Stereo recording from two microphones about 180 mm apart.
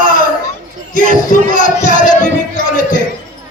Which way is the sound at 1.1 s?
45° left (ahead or behind).